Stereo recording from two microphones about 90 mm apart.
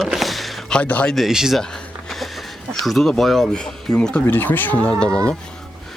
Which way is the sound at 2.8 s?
Centre (ahead or behind).